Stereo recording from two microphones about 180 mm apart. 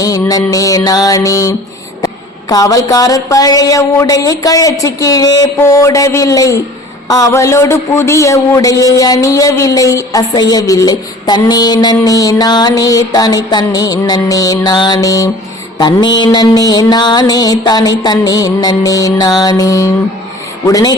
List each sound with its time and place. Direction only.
0.0 s a man's voice: 20° left (ahead or behind)